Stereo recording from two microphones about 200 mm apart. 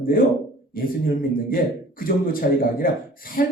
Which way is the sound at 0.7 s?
45° left (ahead or behind).